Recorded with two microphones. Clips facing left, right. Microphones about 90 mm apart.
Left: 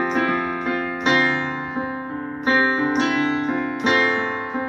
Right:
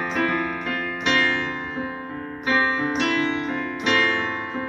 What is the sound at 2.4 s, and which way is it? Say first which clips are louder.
Music: left 3 dB; 35° left (ahead or behind).